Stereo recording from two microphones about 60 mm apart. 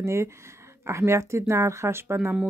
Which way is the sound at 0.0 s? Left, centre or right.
Right.